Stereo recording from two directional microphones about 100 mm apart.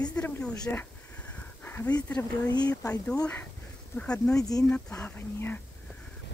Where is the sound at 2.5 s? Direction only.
40° left (ahead or behind).